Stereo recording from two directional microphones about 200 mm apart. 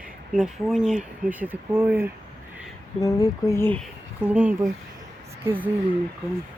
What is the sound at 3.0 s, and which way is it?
Speech, 15° left (ahead or behind).